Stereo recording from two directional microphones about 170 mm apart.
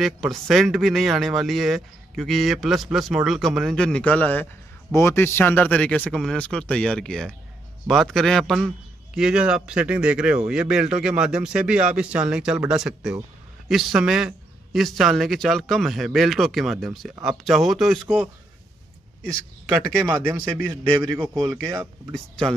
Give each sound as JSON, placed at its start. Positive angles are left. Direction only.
{"t": 0.0, "sound": "a man's voice", "side_deg": 0}
{"t": 20.1, "sound": "a man's voice", "side_deg": -15}
{"t": 22.1, "sound": "a man's voice", "side_deg": 5}